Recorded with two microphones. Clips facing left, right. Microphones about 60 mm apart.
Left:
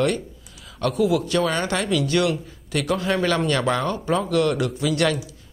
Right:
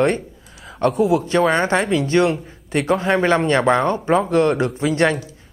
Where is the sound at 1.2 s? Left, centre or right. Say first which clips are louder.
Right 5 dB; right.